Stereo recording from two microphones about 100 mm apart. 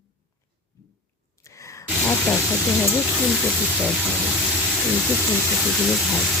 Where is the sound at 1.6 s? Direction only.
30° left (ahead or behind).